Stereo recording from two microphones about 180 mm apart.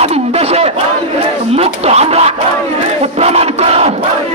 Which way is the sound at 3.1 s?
35° right (ahead or behind).